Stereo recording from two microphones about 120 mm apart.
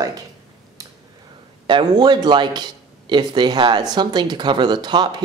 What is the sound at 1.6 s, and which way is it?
Speech, 40° right (ahead or behind).